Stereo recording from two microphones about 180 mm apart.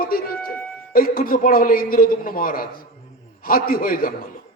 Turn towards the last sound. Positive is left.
turn(degrees=50)  # may be behind; listen again after turning